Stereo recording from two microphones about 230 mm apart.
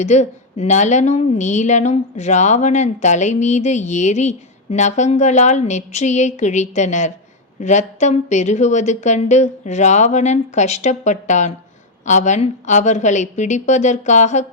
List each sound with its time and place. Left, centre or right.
0.0 s a woman's voice: left